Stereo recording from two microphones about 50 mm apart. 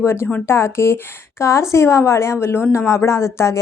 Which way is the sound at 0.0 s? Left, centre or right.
Left.